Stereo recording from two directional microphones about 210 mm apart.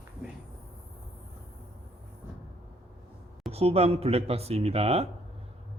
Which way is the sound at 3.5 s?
30° right (ahead or behind).